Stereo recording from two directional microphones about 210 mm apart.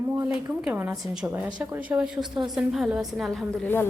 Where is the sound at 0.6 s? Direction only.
5° right (ahead or behind).